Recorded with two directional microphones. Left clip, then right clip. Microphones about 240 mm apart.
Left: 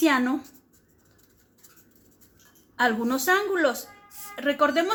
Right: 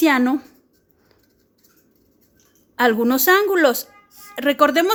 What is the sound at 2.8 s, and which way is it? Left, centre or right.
A woman's voice, right.